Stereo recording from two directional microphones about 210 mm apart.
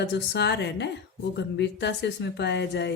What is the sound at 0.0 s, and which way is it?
A woman's voice, 55° left (ahead or behind).